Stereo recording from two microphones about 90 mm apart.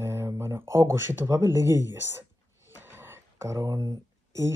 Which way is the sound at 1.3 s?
30° right (ahead or behind).